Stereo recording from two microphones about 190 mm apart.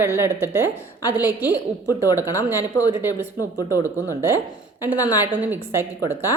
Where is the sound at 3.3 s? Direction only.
15° left (ahead or behind).